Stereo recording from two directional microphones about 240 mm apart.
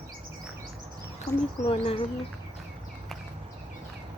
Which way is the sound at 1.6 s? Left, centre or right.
Left.